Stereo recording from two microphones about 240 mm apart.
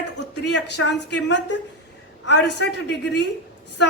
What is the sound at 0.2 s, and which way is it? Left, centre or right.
A woman's voice, left.